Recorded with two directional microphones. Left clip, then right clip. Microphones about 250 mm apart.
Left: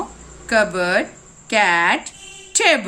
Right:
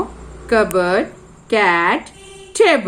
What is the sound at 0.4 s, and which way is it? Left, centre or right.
Speech, left.